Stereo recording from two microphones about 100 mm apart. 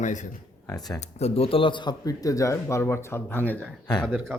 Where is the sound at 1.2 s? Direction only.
75° left (ahead or behind); by 1.9 s 55° left (ahead or behind).